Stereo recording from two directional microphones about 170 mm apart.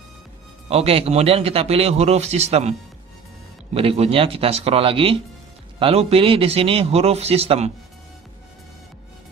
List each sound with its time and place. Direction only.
0.7 s a man's voice: 35° right (ahead or behind)
3.7 s a man's voice: 35° right (ahead or behind)